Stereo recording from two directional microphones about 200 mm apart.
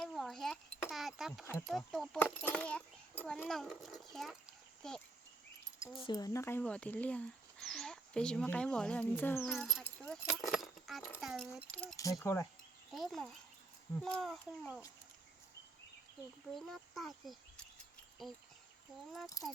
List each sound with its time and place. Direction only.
0.0 s a sound: centre (ahead or behind)
1.6 s a child's voice: centre (ahead or behind)
5.8 s speech: 25° left (ahead or behind)
9.5 s a child's voice: centre (ahead or behind)
12.9 s a child's voice: centre (ahead or behind)
16.6 s a child's voice: centre (ahead or behind)
19.4 s speech: 15° left (ahead or behind)